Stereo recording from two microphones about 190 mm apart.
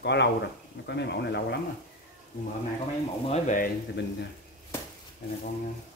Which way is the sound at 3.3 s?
45° left (ahead or behind).